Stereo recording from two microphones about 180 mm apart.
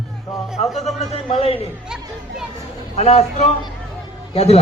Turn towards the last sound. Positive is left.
turn(degrees=35)  # may be behind; listen again after turning